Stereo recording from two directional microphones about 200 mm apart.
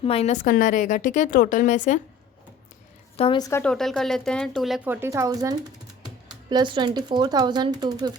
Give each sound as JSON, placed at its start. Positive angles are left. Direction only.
{"t": 0.0, "sound": "a woman's voice", "side_deg": 30}
{"t": 3.2, "sound": "a woman's voice", "side_deg": 25}
{"t": 3.6, "sound": "speech", "side_deg": 5}
{"t": 4.9, "sound": "speech", "side_deg": -15}